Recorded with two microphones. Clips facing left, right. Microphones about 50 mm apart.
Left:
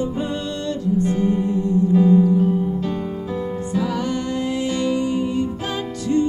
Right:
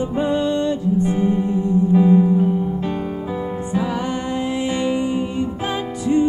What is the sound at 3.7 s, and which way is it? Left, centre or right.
Music, right.